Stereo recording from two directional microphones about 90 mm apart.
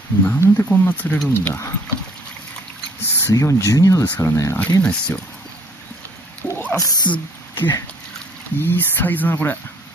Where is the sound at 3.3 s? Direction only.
35° left (ahead or behind).